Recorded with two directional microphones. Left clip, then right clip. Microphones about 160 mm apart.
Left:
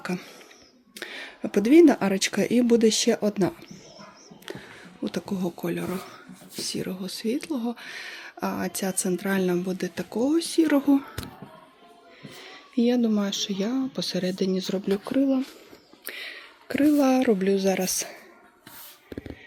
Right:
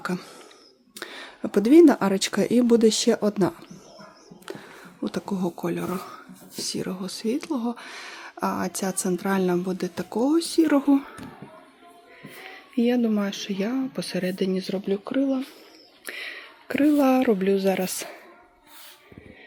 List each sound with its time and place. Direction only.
0.0 s speech: 10° right (ahead or behind)
4.4 s a sound: 10° right (ahead or behind)
5.8 s speech: 5° right (ahead or behind)
12.4 s speech: centre (ahead or behind)
14.8 s speech: 15° left (ahead or behind)
16.0 s speech: 5° right (ahead or behind)